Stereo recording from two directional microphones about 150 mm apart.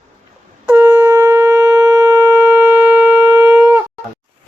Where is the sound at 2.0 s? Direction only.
25° right (ahead or behind).